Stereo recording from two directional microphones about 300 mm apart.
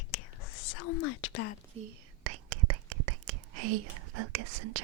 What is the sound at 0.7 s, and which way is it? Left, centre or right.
Whispering, left.